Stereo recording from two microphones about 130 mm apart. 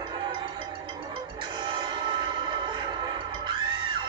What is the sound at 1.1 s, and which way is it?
Music, 40° right (ahead or behind).